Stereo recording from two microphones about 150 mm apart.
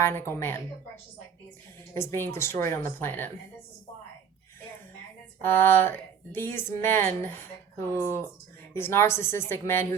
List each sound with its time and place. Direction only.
0.0 s speech: 15° left (ahead or behind)
1.9 s speech: 15° left (ahead or behind)
5.4 s speech: 15° left (ahead or behind)